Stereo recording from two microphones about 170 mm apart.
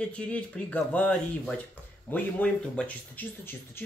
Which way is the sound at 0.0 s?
5° left (ahead or behind).